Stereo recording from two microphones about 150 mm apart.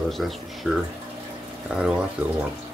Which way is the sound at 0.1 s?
Centre (ahead or behind).